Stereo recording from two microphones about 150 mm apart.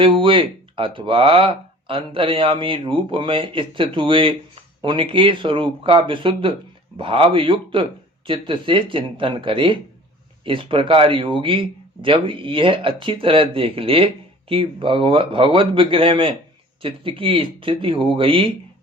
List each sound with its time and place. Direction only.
0.0 s speech: 35° right (ahead or behind)